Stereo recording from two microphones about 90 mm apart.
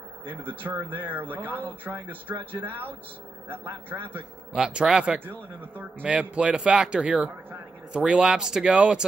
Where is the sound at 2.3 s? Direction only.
25° right (ahead or behind).